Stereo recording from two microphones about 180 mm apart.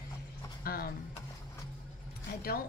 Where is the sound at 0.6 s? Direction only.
55° left (ahead or behind).